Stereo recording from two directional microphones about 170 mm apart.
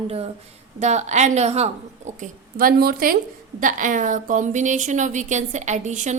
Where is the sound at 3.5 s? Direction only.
50° right (ahead or behind).